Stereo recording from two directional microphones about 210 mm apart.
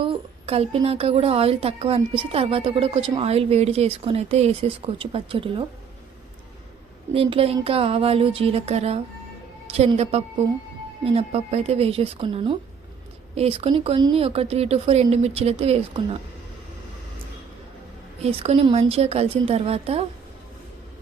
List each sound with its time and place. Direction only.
0.0 s a woman's voice: 25° right (ahead or behind)
7.1 s a woman's voice: 25° right (ahead or behind)
18.2 s a woman's voice: 30° right (ahead or behind)